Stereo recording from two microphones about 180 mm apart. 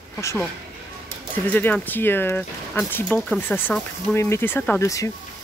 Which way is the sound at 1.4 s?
10° left (ahead or behind).